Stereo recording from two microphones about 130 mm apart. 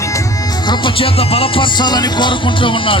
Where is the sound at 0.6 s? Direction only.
35° left (ahead or behind).